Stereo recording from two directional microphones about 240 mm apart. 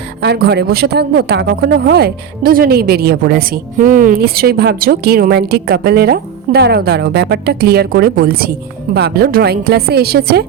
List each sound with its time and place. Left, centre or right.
0.2 s a woman's voice: right